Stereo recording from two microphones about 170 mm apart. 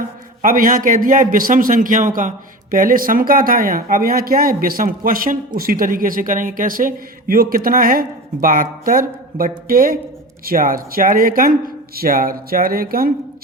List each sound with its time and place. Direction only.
0.4 s a man's voice: 55° right (ahead or behind)